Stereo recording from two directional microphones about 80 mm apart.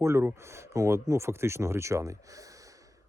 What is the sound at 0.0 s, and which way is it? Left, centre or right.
Speech, right.